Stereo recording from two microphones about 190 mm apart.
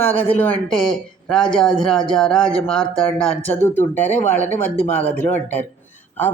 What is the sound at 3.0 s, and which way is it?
Speech, 10° left (ahead or behind).